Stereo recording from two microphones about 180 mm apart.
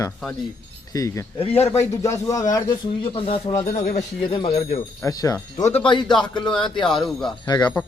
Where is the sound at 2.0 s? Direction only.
15° left (ahead or behind).